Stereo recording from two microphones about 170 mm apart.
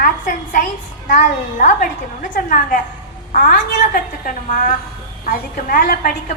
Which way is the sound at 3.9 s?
55° left (ahead or behind).